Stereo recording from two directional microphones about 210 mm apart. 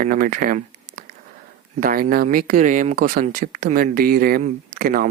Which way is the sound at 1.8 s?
40° right (ahead or behind).